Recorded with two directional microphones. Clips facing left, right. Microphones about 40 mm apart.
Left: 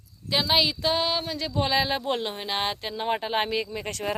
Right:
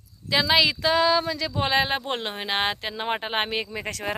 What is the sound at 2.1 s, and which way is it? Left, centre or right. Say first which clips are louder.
Speech: right 2 dB; right.